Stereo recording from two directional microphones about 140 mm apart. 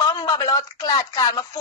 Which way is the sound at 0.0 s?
25° left (ahead or behind).